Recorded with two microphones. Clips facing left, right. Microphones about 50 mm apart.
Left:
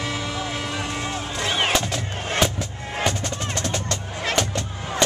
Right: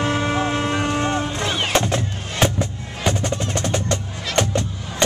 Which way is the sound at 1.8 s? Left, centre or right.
Right.